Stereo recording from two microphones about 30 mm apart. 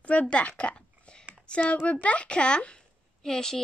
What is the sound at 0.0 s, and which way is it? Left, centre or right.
Speech, left.